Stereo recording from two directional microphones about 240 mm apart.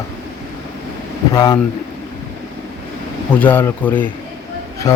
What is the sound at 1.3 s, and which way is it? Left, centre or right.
Speech, centre.